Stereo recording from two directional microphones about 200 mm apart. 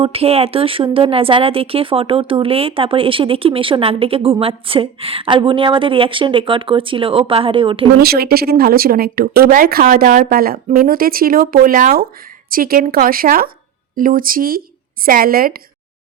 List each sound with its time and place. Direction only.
0.0 s speech: 30° right (ahead or behind)
7.9 s speech: 50° right (ahead or behind)